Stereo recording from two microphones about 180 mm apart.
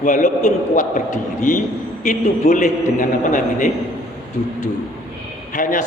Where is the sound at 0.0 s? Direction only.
45° left (ahead or behind).